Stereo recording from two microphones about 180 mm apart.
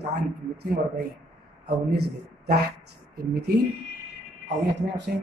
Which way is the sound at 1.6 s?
60° right (ahead or behind).